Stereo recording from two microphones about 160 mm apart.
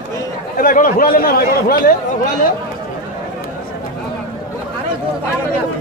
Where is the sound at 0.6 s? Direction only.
55° left (ahead or behind).